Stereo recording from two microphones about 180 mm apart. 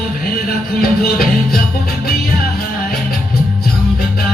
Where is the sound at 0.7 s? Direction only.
55° left (ahead or behind).